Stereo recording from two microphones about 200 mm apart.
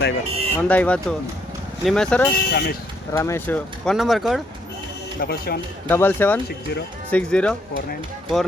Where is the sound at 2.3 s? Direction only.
55° left (ahead or behind).